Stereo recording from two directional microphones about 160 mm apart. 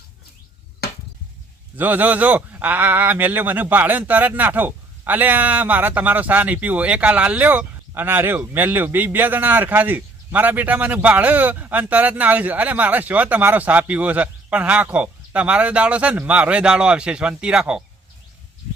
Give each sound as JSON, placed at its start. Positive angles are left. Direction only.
{"t": 0.8, "sound": "chop", "side_deg": 70}
{"t": 1.7, "sound": "speech", "side_deg": -10}